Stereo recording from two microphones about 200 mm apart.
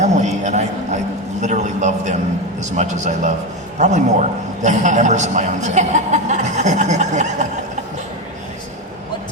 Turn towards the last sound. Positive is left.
turn(degrees=-35)  # may be behind; listen again after turning